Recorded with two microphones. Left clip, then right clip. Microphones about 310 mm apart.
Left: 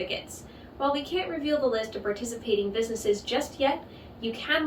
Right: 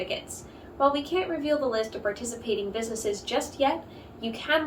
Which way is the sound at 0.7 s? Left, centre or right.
Centre.